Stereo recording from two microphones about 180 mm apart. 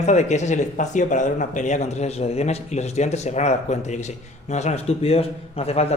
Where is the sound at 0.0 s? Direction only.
40° left (ahead or behind).